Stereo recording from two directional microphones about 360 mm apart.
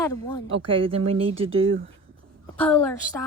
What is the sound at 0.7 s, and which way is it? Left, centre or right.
Speech, centre.